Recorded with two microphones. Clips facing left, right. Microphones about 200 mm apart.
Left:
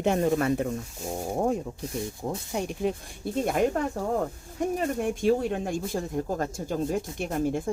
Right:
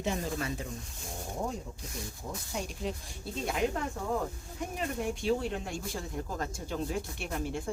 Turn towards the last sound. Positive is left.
turn(degrees=50)  # may be behind; listen again after turning